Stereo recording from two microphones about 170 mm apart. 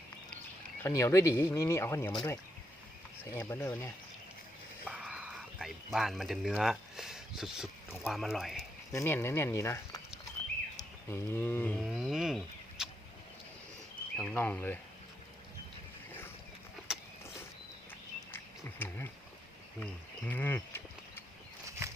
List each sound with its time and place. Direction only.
0.8 s speech: 15° left (ahead or behind)
4.9 s speech: 5° right (ahead or behind)
8.9 s speech: 15° left (ahead or behind)
11.8 s a sound: centre (ahead or behind)
14.2 s speech: 10° left (ahead or behind)
18.3 s frog: 10° left (ahead or behind)
19.8 s a sound: 10° left (ahead or behind)